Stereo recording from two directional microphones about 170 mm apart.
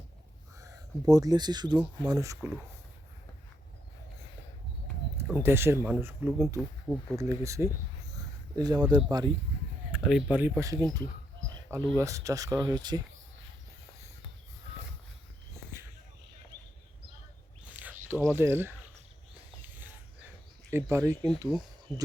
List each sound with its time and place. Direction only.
0.6 s speech: 20° right (ahead or behind)
5.4 s speech: 15° right (ahead or behind)
9.9 s speech: centre (ahead or behind); by 13.0 s 25° right (ahead or behind)
18.1 s speech: 15° right (ahead or behind)
19.6 s livestock: 10° right (ahead or behind)
20.7 s speech: 15° right (ahead or behind)